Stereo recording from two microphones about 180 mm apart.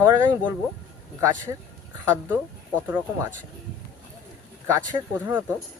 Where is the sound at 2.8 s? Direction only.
10° right (ahead or behind).